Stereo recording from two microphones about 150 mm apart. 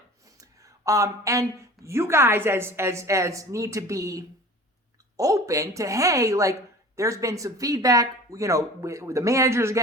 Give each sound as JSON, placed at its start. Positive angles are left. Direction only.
{"t": 0.3, "sound": "a woman's voice", "side_deg": -20}